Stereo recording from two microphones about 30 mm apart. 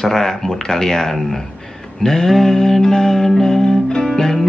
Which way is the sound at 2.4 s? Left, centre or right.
Centre.